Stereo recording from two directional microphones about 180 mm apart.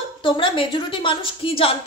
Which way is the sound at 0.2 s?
30° left (ahead or behind).